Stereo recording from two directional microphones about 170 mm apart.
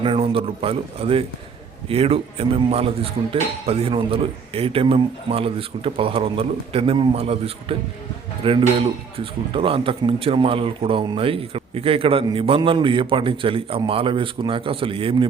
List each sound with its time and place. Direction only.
0.0 s speech: 35° right (ahead or behind)